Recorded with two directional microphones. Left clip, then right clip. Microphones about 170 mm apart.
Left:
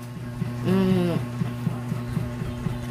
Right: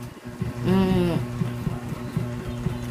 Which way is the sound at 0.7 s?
20° right (ahead or behind).